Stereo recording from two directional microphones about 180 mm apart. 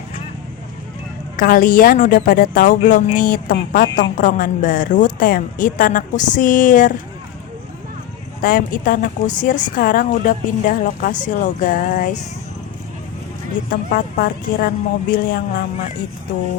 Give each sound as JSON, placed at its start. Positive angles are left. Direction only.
{"t": 1.4, "sound": "a woman's voice", "side_deg": 50}
{"t": 8.4, "sound": "a woman's voice", "side_deg": 50}
{"t": 13.7, "sound": "a woman's voice", "side_deg": 55}